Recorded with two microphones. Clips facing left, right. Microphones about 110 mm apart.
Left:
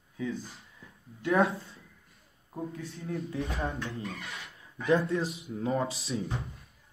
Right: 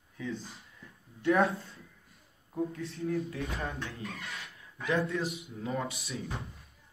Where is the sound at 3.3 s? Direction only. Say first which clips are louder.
Left 3 dB; 30° left (ahead or behind).